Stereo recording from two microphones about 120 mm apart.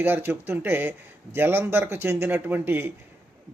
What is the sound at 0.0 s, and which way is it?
Speech, 20° right (ahead or behind).